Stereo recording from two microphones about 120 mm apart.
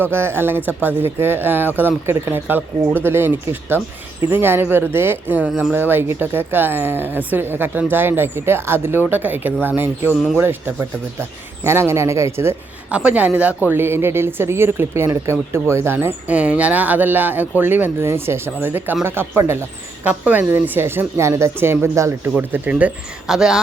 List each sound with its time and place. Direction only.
0.0 s a man's voice: 20° right (ahead or behind)
13.0 s a man's voice: 10° right (ahead or behind)